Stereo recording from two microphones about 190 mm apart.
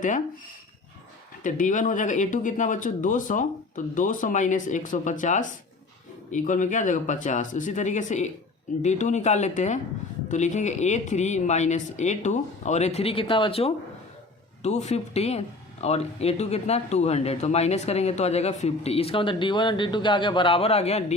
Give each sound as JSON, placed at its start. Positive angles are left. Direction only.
{"t": 1.5, "sound": "speech", "side_deg": 40}